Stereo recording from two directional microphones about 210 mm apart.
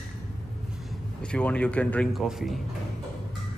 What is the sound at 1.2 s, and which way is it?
A man's voice, 5° left (ahead or behind).